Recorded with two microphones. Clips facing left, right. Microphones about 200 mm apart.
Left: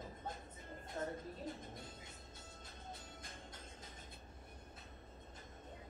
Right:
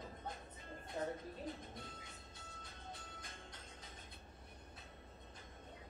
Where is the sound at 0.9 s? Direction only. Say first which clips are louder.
Right 1 dB; 15° right (ahead or behind).